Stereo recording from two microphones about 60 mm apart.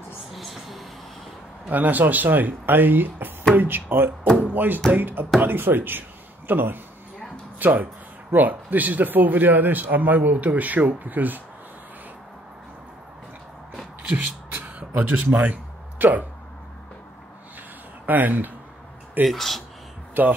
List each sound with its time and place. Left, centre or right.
0.3 s a sound: centre
1.7 s speech: right
14.1 s a sound: right
18.0 s speech: right
19.2 s speech: centre
20.2 s speech: right